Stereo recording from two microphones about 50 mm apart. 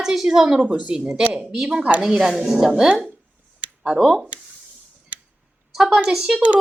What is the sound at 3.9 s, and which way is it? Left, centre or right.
Speech, centre.